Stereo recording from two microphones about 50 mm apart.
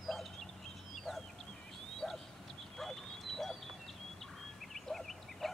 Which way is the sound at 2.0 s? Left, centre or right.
Centre.